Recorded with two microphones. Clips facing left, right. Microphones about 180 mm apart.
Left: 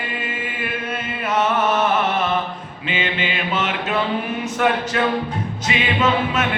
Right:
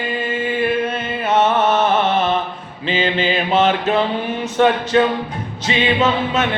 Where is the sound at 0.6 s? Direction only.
30° right (ahead or behind).